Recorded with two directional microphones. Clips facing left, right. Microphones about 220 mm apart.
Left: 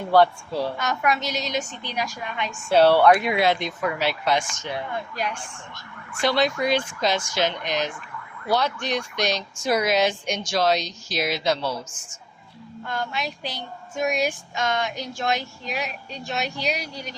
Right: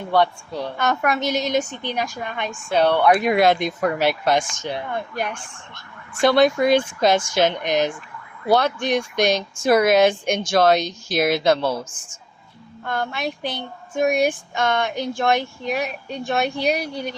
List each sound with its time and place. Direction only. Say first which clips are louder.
0.1 s a woman's voice: left 2 dB; 5° left (ahead or behind)
0.8 s speech: right 3 dB; 55° right (ahead or behind)
2.7 s speech: left 2 dB; 5° left (ahead or behind)
3.2 s speech: right 5 dB; 45° right (ahead or behind)
12.8 s child singing: right 4 dB; 55° right (ahead or behind)